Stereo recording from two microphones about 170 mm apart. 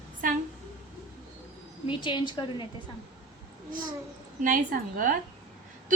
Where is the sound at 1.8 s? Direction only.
30° left (ahead or behind).